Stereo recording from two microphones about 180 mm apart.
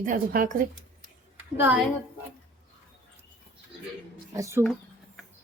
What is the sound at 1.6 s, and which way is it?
Speech, 10° right (ahead or behind).